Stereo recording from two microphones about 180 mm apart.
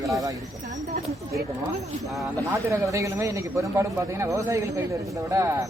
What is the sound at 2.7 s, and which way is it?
A man's voice, 15° right (ahead or behind).